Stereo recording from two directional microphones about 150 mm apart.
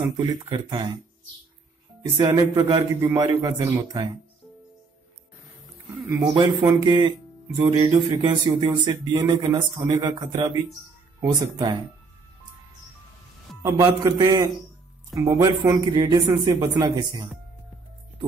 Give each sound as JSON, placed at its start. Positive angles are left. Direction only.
{"t": 0.2, "sound": "speech", "side_deg": -30}
{"t": 2.1, "sound": "speech", "side_deg": -25}
{"t": 6.0, "sound": "speech", "side_deg": -25}
{"t": 7.6, "sound": "speech", "side_deg": -20}
{"t": 13.6, "sound": "speech", "side_deg": -20}